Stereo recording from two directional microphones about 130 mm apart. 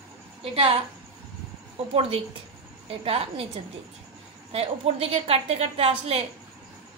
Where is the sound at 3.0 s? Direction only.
45° right (ahead or behind).